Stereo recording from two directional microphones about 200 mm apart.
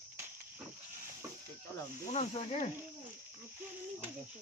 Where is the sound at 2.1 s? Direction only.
35° left (ahead or behind).